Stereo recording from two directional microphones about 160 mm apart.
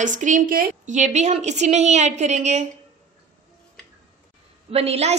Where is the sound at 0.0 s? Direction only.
50° right (ahead or behind).